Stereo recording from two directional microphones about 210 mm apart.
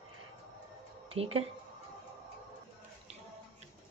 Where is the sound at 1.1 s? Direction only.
30° right (ahead or behind).